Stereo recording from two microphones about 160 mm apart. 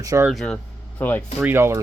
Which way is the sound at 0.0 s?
20° right (ahead or behind).